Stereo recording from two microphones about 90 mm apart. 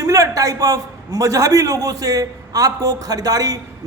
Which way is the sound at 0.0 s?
40° right (ahead or behind).